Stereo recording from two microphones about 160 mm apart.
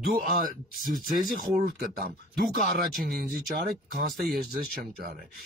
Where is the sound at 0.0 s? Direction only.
65° right (ahead or behind).